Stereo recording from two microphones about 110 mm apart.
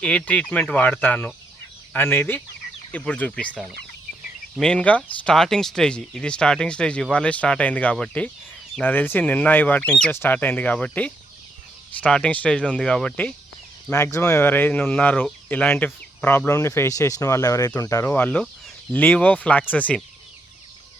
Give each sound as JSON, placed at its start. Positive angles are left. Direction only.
{"t": 0.0, "sound": "speech", "side_deg": 10}
{"t": 4.5, "sound": "speech", "side_deg": 5}
{"t": 13.9, "sound": "speech", "side_deg": 25}
{"t": 18.1, "sound": "speech", "side_deg": 15}